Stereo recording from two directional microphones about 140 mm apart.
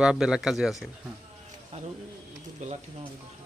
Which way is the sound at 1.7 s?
50° right (ahead or behind).